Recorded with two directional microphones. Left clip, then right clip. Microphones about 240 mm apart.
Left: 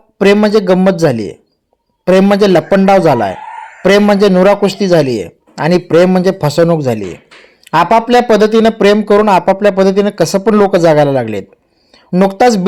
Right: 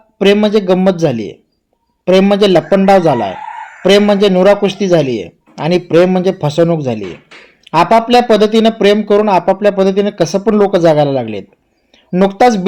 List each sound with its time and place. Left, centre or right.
0.2 s speech: centre
1.1 s speech: left
2.0 s speech: centre
7.8 s speech: left